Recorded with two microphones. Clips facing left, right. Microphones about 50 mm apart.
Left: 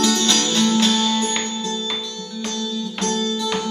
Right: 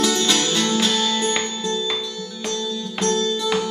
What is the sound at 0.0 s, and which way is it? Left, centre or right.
Music, centre.